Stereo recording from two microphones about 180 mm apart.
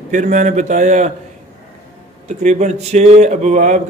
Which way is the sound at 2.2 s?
40° right (ahead or behind).